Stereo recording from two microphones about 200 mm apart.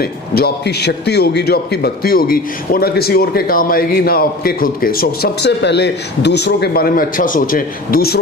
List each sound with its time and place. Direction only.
0.0 s a man's voice: 50° left (ahead or behind)